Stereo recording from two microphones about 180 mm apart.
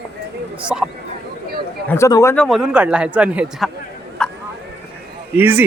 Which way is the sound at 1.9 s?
15° left (ahead or behind).